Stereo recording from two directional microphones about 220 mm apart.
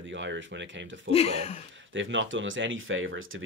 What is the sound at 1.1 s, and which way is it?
Speech, 25° left (ahead or behind).